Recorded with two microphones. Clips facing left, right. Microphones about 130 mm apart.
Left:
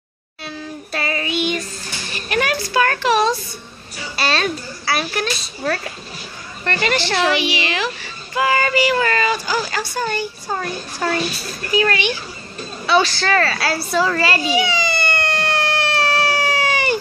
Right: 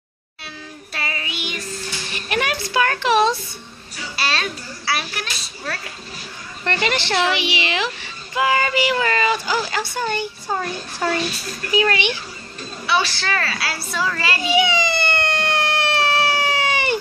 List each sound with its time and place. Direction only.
0.9 s child singing: 45° left (ahead or behind)
2.1 s a sound: 20° right (ahead or behind)
4.2 s a child's voice: 40° left (ahead or behind)
6.6 s speech: 20° right (ahead or behind)
12.9 s a child's voice: 45° left (ahead or behind)
14.4 s a sound: 15° right (ahead or behind)